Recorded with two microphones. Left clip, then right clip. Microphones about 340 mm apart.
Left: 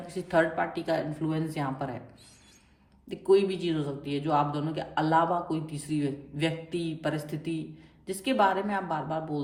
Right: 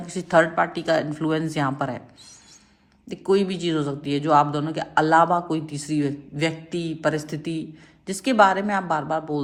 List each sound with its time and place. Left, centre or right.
0.1 s a man's voice: centre
3.1 s a man's voice: right